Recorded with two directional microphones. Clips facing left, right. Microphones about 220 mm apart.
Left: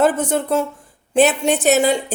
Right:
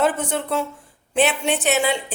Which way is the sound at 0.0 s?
45° left (ahead or behind).